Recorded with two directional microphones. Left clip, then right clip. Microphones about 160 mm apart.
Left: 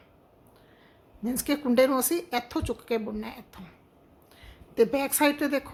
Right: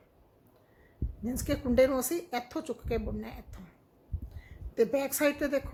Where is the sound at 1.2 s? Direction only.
15° left (ahead or behind).